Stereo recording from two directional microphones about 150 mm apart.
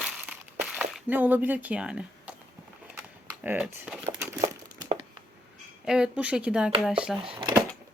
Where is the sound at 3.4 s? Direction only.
10° right (ahead or behind).